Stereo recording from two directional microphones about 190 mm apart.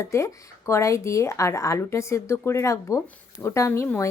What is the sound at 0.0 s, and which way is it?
Speech, 15° left (ahead or behind).